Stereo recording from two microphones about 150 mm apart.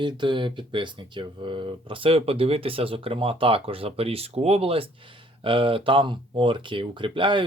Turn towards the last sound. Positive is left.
turn(degrees=-35)  # may be behind; listen again after turning